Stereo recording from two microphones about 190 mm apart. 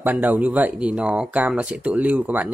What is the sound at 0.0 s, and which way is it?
Speech, 10° right (ahead or behind).